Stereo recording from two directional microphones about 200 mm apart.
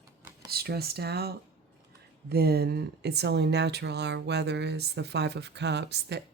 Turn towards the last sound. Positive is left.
turn(degrees=-60)  # may be behind; listen again after turning